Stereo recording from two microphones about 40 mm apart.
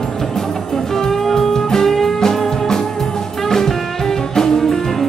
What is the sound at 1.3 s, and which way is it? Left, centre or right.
Music, centre.